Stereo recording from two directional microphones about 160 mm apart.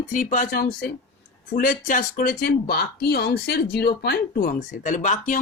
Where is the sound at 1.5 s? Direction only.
60° left (ahead or behind).